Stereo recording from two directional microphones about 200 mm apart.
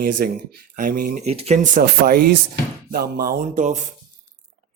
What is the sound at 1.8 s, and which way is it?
Speech, 50° right (ahead or behind).